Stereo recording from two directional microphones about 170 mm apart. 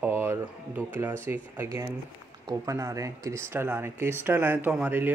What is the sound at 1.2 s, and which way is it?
Speech, 15° right (ahead or behind).